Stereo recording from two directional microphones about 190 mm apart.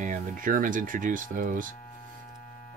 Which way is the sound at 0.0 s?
45° right (ahead or behind).